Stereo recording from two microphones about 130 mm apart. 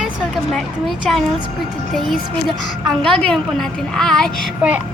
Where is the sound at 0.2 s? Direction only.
5° left (ahead or behind).